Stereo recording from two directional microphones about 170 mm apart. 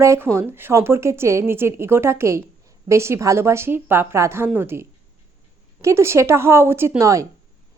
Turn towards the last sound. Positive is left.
turn(degrees=-15)  # may be behind; listen again after turning